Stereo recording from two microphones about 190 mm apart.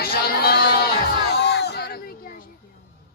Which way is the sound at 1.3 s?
60° left (ahead or behind).